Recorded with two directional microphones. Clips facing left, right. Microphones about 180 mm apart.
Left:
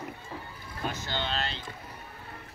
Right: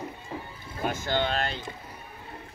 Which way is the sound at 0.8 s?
50° right (ahead or behind).